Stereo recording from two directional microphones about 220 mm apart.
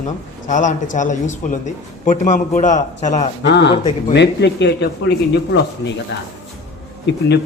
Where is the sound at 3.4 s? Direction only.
50° left (ahead or behind).